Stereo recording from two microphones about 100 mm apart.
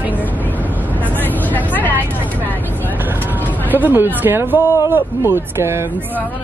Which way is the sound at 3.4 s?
15° left (ahead or behind).